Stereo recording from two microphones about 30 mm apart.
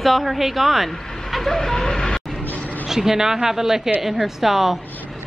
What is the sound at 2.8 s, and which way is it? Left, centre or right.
A woman's voice, centre.